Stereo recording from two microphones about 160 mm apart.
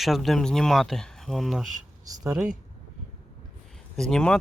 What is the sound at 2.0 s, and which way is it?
Speech, 20° right (ahead or behind).